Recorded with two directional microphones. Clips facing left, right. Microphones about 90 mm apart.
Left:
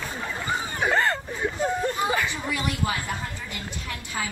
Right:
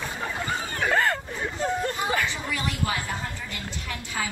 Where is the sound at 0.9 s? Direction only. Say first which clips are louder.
Even; centre (ahead or behind).